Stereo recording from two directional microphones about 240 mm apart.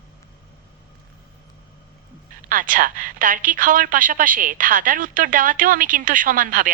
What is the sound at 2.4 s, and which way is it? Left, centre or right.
A woman's voice, right.